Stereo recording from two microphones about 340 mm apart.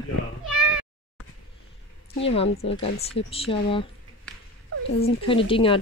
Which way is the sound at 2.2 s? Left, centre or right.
Centre.